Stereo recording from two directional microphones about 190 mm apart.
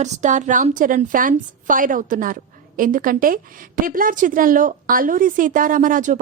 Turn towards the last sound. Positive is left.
turn(degrees=-45)  # may be behind; listen again after turning